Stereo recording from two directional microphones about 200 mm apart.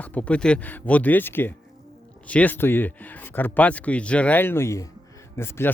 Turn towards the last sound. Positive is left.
turn(degrees=10)  # may be behind; listen again after turning